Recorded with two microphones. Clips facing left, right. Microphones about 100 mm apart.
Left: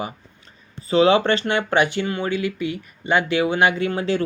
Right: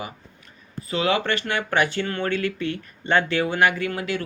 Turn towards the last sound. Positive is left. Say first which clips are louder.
# left 5 dB
turn(degrees=30)  # may be behind; listen again after turning